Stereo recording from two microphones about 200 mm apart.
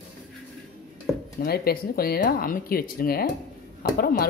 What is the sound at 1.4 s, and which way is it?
Speech, 50° left (ahead or behind).